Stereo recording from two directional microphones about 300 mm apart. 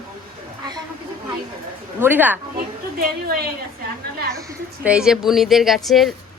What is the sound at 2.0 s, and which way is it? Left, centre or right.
Speech, centre.